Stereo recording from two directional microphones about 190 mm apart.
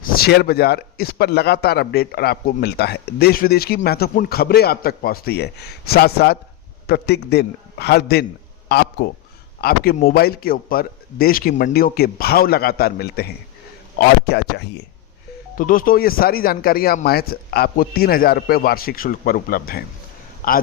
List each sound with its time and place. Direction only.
0.0 s a man's voice: 50° left (ahead or behind)
15.5 s speech: 45° left (ahead or behind)